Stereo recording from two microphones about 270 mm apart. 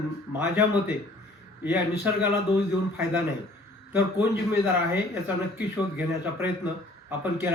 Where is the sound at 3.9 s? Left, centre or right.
Centre.